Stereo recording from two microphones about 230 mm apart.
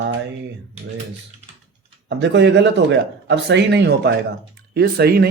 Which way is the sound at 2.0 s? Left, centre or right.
Right.